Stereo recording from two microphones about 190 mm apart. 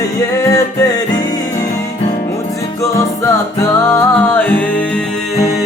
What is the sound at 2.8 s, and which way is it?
Music, 15° left (ahead or behind).